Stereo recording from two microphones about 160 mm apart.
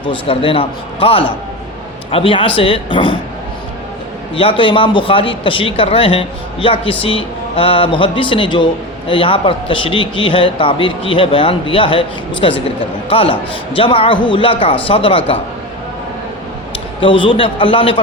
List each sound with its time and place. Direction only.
0.0 s speech: 35° left (ahead or behind)
4.4 s speech: 35° left (ahead or behind)
17.0 s speech: 30° left (ahead or behind)